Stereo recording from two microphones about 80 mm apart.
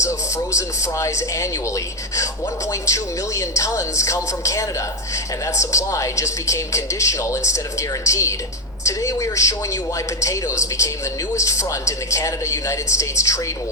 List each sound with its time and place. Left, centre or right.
0.0 s speech: left